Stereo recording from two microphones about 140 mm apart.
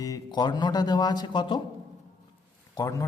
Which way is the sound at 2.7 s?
25° left (ahead or behind).